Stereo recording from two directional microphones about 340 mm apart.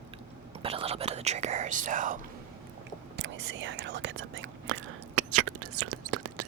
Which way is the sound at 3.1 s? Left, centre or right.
Right.